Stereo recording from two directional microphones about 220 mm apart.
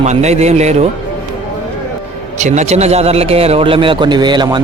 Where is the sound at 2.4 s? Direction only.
30° right (ahead or behind).